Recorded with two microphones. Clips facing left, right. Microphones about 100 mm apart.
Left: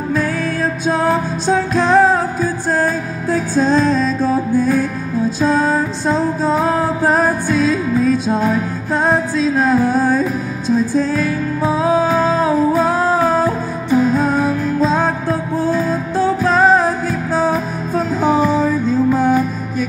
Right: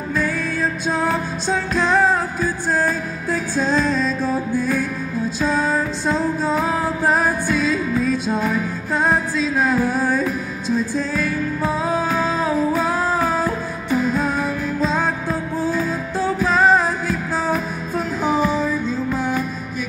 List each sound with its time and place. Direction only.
0.9 s music: 35° left (ahead or behind)